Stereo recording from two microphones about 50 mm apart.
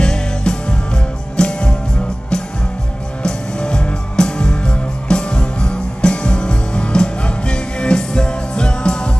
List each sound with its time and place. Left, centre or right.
0.0 s music: centre
3.2 s music: centre